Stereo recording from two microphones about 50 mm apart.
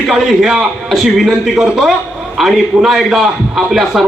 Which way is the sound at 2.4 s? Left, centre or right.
Centre.